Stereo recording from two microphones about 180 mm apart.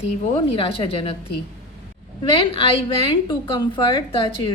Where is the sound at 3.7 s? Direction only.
25° left (ahead or behind).